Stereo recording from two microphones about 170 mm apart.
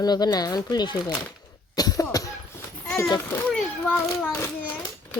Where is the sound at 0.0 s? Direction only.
25° left (ahead or behind).